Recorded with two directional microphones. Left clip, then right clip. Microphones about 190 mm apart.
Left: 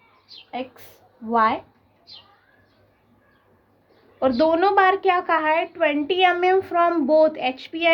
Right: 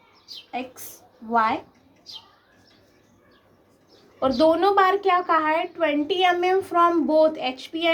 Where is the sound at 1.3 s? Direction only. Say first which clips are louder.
Left 2 dB; 40° left (ahead or behind).